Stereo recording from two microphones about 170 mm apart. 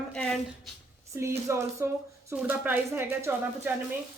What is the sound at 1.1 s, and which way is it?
Speech, 15° right (ahead or behind).